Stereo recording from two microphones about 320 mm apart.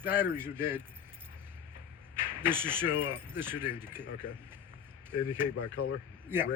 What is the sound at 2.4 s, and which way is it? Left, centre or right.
Speech, centre.